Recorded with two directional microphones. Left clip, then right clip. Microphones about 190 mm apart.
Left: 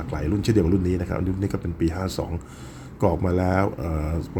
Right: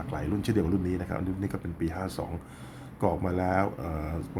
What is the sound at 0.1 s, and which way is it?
A man's voice, 10° left (ahead or behind).